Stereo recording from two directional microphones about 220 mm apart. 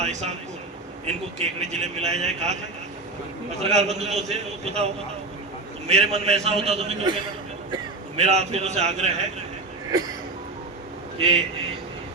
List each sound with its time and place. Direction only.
0.0 s a man's voice: 30° right (ahead or behind)
1.6 s a man's voice: 30° right (ahead or behind)
3.6 s a man's voice: 30° right (ahead or behind)
5.9 s a man's voice: 30° right (ahead or behind)
11.2 s a man's voice: 25° right (ahead or behind)